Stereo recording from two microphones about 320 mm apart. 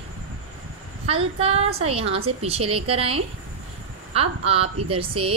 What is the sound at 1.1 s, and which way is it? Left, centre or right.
A woman's voice, centre.